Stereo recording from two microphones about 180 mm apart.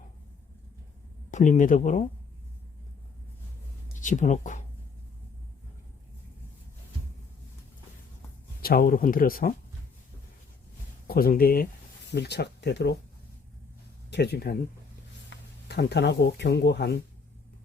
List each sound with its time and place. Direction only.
1.3 s speech: 45° left (ahead or behind)
3.9 s speech: 45° left (ahead or behind)
8.6 s speech: 55° left (ahead or behind)
11.1 s speech: 55° left (ahead or behind)
12.1 s speech: 65° left (ahead or behind)
14.1 s speech: 65° left (ahead or behind)